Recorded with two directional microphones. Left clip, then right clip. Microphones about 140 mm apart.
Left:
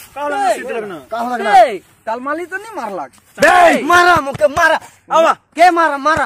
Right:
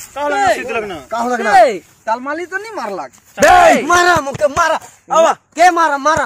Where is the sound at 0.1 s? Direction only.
35° right (ahead or behind).